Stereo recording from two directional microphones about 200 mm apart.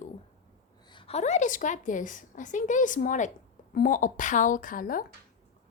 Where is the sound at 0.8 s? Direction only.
25° left (ahead or behind); by 5.0 s 45° left (ahead or behind).